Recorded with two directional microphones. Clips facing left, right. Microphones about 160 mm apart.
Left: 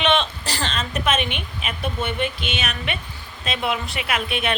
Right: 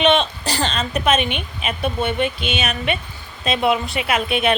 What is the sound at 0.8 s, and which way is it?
A woman's voice, 20° right (ahead or behind).